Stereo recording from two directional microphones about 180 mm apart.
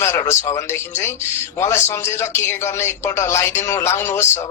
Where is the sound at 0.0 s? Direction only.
15° left (ahead or behind).